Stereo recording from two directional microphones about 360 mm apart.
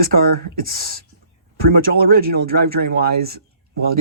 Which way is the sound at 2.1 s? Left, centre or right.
Right.